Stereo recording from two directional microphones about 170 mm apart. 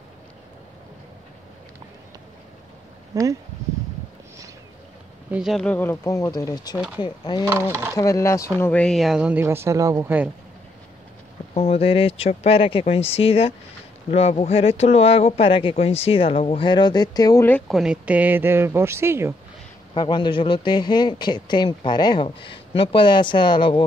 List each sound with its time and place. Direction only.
3.1 s speech: 20° right (ahead or behind)
5.3 s speech: centre (ahead or behind)
11.5 s speech: 35° left (ahead or behind)
17.5 s speech: 5° left (ahead or behind); by 19.3 s 15° right (ahead or behind)
19.9 s speech: 30° left (ahead or behind)